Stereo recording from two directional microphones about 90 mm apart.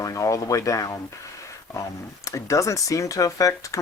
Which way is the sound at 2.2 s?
35° left (ahead or behind).